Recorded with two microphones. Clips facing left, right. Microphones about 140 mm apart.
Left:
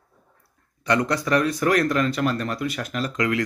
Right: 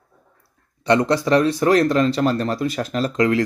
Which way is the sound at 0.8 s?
30° right (ahead or behind).